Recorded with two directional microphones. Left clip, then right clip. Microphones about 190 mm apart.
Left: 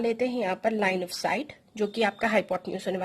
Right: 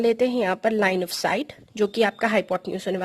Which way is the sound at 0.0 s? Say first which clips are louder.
Right 6 dB; 50° right (ahead or behind).